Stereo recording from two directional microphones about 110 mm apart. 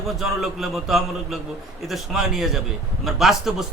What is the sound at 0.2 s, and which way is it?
A man's voice, centre (ahead or behind).